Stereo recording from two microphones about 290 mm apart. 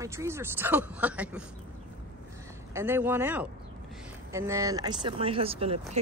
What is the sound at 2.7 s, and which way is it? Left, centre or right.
Speech, centre.